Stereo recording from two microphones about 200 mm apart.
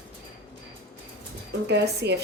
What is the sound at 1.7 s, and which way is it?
Speech, 55° right (ahead or behind).